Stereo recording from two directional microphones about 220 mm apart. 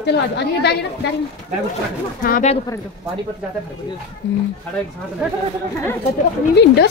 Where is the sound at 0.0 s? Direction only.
50° left (ahead or behind).